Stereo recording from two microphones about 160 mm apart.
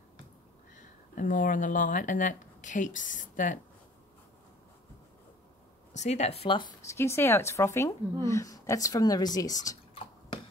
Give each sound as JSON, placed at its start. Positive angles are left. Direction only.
{"t": 1.1, "sound": "speech", "side_deg": 55}
{"t": 5.9, "sound": "speech", "side_deg": 45}
{"t": 6.8, "sound": "a woman's voice", "side_deg": 15}